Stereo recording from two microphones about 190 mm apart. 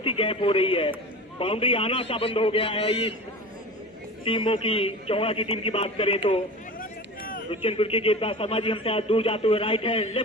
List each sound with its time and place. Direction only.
0.0 s speech: 30° left (ahead or behind)
4.2 s speech: 25° left (ahead or behind)
6.7 s a sound: 45° left (ahead or behind)
7.5 s speech: 30° left (ahead or behind)